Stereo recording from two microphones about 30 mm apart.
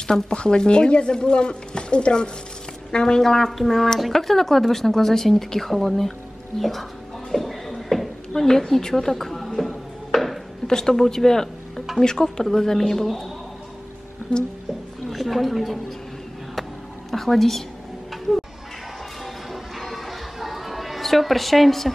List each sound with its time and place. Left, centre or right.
0.3 s speech: left
3.2 s speech: centre
6.6 s a sound: centre
8.4 s speech: centre
9.5 s a sound: centre
10.7 s speech: centre
12.5 s speech: centre
14.3 s speech: left
15.0 s a woman's voice: centre
17.1 s a woman's voice: centre
18.1 s music: centre
19.5 s music: centre